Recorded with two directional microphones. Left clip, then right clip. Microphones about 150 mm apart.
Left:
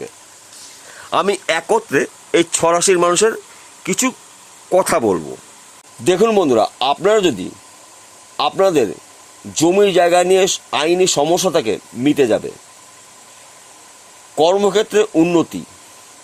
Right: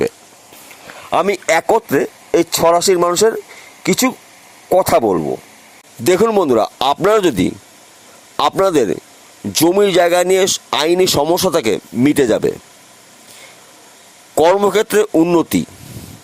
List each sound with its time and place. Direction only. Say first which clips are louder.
1.3 s speech: right 5 dB; 25° right (ahead or behind)
6.1 s speech: right 1 dB; 35° right (ahead or behind)
14.3 s speech: right 2 dB; 40° right (ahead or behind)
15.1 s speech: right 2 dB; 30° right (ahead or behind)
15.4 s speech: right 2 dB; 45° right (ahead or behind)